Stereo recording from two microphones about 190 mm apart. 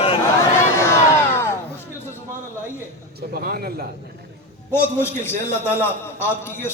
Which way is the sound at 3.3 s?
55° right (ahead or behind).